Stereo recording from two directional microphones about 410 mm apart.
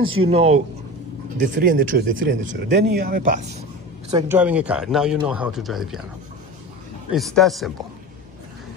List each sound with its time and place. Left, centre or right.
0.3 s speech: centre
4.1 s speech: centre
7.1 s speech: centre